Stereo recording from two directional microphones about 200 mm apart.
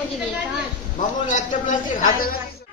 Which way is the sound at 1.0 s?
40° left (ahead or behind).